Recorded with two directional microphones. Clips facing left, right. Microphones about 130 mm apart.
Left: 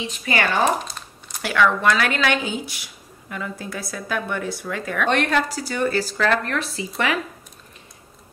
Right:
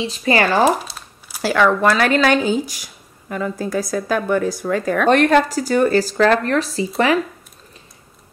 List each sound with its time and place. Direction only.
0.0 s speech: 35° right (ahead or behind)
0.6 s crumpling: 5° right (ahead or behind)
1.4 s speech: 35° right (ahead or behind)